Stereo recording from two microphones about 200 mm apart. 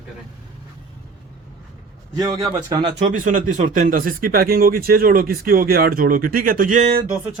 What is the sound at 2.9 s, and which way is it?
Speech, 40° right (ahead or behind).